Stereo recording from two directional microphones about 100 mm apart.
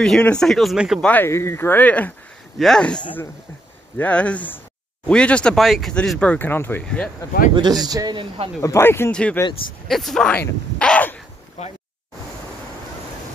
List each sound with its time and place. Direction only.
0.0 s speech: 10° left (ahead or behind)
1.0 s speech: 20° left (ahead or behind)
4.0 s speech: 15° left (ahead or behind)
6.3 s speech: 20° left (ahead or behind)
6.8 s speech: 10° left (ahead or behind)
7.5 s a man's voice: 45° right (ahead or behind)
8.5 s speech: 25° left (ahead or behind)
9.1 s speech: 10° left (ahead or behind)
10.3 s speech: 15° left (ahead or behind)
11.6 s speech: 90° left